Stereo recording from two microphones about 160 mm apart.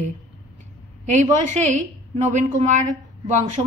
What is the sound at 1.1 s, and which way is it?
A woman's voice, 45° right (ahead or behind).